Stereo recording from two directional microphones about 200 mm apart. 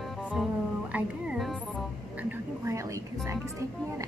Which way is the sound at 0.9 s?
5° right (ahead or behind).